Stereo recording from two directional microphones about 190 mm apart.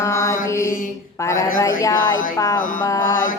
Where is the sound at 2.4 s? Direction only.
20° left (ahead or behind).